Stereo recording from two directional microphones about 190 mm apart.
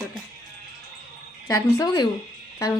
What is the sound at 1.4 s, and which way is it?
Speech, 15° left (ahead or behind).